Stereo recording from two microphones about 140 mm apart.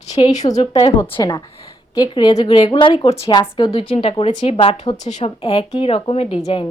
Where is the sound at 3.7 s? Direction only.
40° left (ahead or behind).